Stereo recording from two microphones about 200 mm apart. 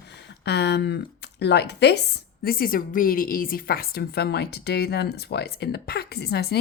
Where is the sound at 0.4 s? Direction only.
55° left (ahead or behind).